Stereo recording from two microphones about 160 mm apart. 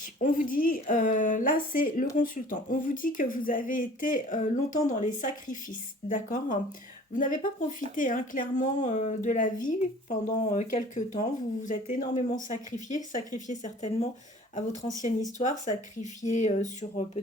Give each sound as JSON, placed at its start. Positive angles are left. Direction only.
{"t": 0.2, "sound": "a woman's voice", "side_deg": 60}